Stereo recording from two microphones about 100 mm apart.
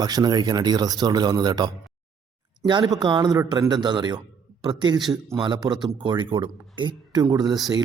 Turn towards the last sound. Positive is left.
turn(degrees=-40)  # may be behind; listen again after turning